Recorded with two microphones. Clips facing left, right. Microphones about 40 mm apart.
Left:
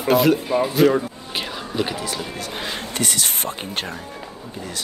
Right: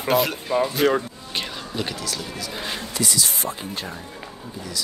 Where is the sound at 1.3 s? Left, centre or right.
Centre.